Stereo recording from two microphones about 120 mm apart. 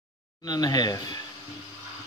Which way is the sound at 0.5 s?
35° left (ahead or behind).